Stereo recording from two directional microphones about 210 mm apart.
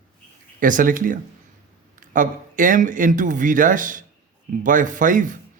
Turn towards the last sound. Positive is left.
turn(degrees=-40)  # may be behind; listen again after turning